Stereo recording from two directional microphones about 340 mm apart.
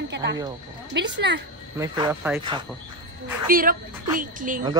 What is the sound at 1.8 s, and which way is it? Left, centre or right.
Speech, centre.